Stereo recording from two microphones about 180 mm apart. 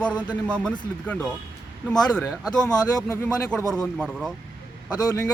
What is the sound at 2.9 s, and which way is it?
Speech, 15° left (ahead or behind).